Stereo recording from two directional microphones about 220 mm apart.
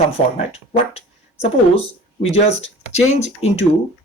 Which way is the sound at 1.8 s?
25° left (ahead or behind).